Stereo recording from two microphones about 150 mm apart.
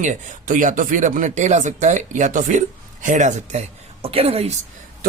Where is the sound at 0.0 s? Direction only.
60° right (ahead or behind); by 4.5 s 45° right (ahead or behind).